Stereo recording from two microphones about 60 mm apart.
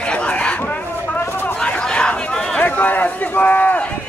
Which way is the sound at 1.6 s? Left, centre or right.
Centre.